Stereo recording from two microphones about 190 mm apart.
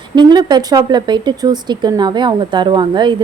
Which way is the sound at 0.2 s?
20° right (ahead or behind).